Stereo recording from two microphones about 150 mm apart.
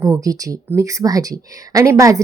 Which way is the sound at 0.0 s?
20° right (ahead or behind).